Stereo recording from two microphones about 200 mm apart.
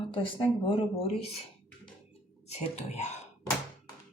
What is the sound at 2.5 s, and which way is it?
Speech, 30° left (ahead or behind).